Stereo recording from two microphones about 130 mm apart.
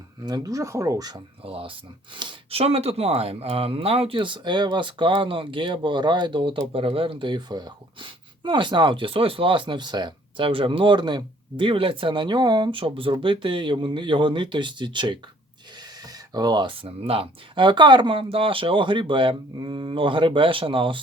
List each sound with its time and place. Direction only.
0.3 s speech: 30° right (ahead or behind)
1.5 s speech: 45° right (ahead or behind)
16.3 s speech: 30° right (ahead or behind)